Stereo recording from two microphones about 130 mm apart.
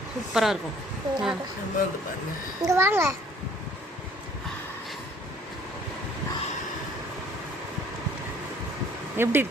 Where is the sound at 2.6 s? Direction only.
20° right (ahead or behind).